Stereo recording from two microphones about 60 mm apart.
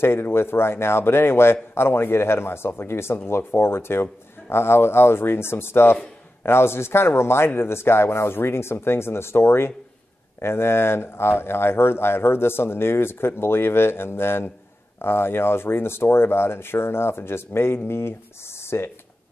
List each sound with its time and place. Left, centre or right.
0.0 s speech: left